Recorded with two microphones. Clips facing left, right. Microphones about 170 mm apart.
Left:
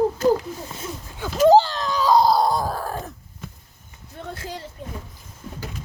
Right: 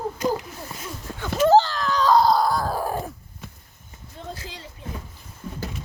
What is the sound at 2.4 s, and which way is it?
Groan, 20° left (ahead or behind).